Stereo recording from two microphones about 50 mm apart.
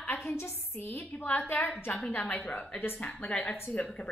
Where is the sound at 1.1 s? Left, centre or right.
Left.